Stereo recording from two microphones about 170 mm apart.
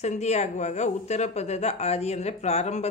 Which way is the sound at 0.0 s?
40° left (ahead or behind).